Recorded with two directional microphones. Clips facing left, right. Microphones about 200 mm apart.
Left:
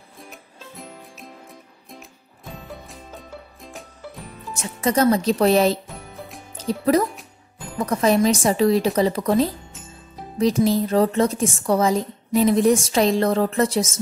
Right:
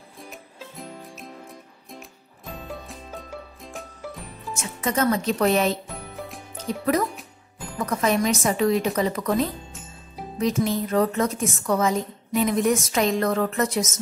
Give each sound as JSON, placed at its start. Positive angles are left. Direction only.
{"t": 0.2, "sound": "music", "side_deg": 0}
{"t": 4.6, "sound": "a woman's voice", "side_deg": 35}
{"t": 5.9, "sound": "music", "side_deg": 0}
{"t": 6.7, "sound": "a woman's voice", "side_deg": 35}